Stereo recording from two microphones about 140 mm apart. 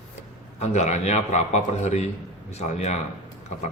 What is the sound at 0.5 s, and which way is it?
A man's voice, 55° left (ahead or behind).